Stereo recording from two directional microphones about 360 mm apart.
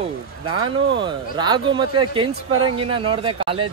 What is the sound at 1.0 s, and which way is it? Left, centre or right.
Speech, centre.